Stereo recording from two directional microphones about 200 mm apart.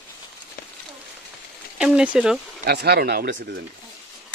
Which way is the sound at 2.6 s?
55° right (ahead or behind).